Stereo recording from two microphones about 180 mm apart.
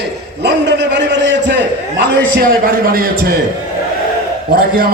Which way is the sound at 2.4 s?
50° right (ahead or behind).